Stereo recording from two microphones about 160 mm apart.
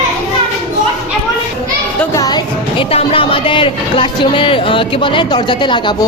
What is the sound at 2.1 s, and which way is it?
Speech, 25° left (ahead or behind).